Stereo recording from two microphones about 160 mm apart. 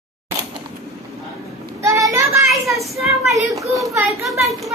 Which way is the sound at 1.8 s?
20° right (ahead or behind).